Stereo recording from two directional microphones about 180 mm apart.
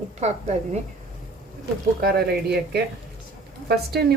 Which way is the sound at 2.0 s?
60° right (ahead or behind).